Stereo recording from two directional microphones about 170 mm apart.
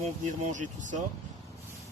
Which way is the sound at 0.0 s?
45° right (ahead or behind).